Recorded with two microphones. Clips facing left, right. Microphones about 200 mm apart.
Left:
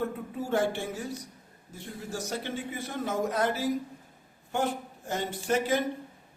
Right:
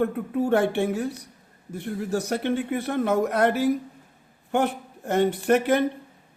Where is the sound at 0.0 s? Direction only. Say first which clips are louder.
Right 9 dB; 65° right (ahead or behind).